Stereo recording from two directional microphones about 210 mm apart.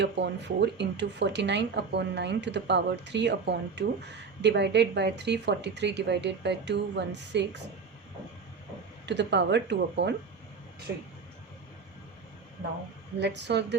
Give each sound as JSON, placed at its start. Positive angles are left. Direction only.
{"t": 0.0, "sound": "speech", "side_deg": -55}
{"t": 9.0, "sound": "speech", "side_deg": -55}
{"t": 13.1, "sound": "speech", "side_deg": -55}